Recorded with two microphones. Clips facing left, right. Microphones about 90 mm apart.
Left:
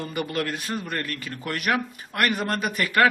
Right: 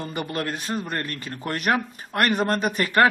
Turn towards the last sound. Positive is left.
turn(degrees=-30)  # may be behind; listen again after turning